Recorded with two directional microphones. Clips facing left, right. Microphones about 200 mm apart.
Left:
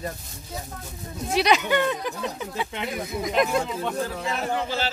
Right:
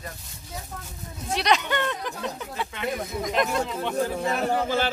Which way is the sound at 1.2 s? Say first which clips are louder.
Left 3 dB; 5° left (ahead or behind).